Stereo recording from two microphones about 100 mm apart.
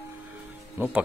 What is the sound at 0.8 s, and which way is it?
Speech, 20° right (ahead or behind).